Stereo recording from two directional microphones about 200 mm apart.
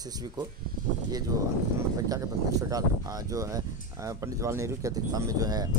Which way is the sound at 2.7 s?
15° right (ahead or behind).